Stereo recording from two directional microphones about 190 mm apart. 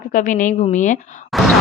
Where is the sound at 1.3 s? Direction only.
Centre (ahead or behind).